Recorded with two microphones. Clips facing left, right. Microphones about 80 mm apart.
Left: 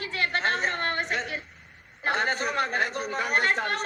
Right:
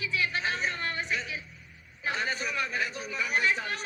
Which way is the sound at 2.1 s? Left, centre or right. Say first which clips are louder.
Left 5 dB; left.